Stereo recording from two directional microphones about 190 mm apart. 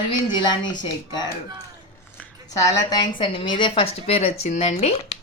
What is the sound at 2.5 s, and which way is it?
A woman's voice, 20° left (ahead or behind).